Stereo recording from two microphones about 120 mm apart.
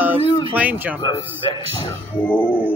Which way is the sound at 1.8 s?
15° left (ahead or behind).